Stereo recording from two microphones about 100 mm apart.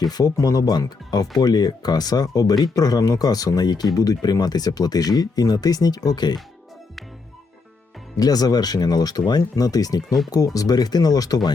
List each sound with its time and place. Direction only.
0.1 s speech: 40° left (ahead or behind)
8.2 s speech: 40° left (ahead or behind)